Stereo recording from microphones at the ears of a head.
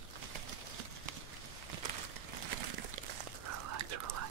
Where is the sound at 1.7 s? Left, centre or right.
Right.